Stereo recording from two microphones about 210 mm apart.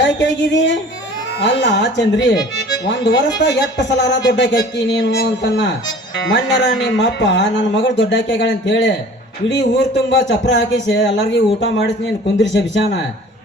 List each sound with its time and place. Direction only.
1.4 s speech: 55° left (ahead or behind)